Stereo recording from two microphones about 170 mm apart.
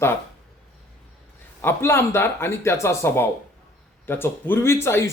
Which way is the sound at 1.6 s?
15° left (ahead or behind).